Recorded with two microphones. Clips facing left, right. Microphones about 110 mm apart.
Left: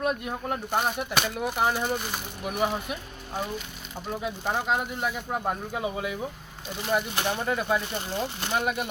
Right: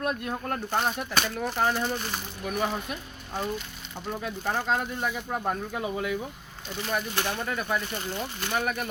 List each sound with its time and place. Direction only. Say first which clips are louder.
0.0 s speech: left 1 dB; 10° left (ahead or behind)
4.2 s speech: left 1 dB; 15° left (ahead or behind)